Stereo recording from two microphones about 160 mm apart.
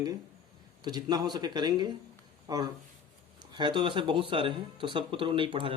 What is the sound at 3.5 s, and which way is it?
Speech, 30° right (ahead or behind).